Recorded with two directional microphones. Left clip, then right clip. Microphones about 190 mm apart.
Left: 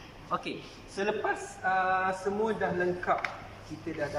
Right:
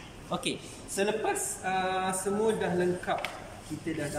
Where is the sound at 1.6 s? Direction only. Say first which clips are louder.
Left 3 dB; 15° right (ahead or behind).